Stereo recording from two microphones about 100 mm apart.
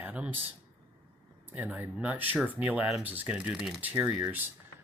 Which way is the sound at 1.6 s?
10° right (ahead or behind).